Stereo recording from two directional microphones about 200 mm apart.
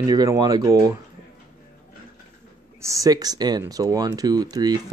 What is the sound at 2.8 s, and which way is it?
Speech, 15° right (ahead or behind).